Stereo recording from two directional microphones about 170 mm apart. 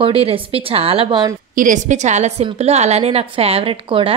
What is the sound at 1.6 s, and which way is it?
Speech, 45° right (ahead or behind).